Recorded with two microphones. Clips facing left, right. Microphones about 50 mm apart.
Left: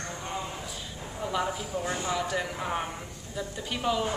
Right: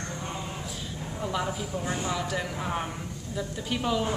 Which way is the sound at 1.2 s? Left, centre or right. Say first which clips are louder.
Left 1 dB; centre.